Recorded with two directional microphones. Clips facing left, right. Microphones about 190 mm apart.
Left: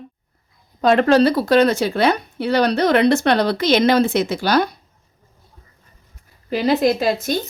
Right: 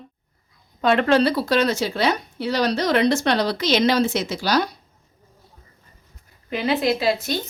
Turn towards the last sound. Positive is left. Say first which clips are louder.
# left 2 dB
turn(degrees=45)  # may be behind; listen again after turning